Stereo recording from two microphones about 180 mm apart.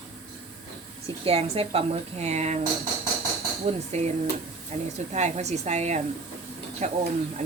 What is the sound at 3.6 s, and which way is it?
A woman's voice, 35° right (ahead or behind).